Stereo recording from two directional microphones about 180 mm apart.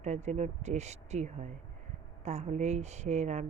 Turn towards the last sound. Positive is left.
turn(degrees=-40)  # may be behind; listen again after turning